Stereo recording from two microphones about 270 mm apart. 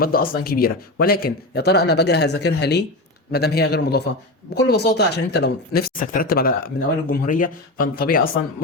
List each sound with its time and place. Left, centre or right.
0.0 s speech: left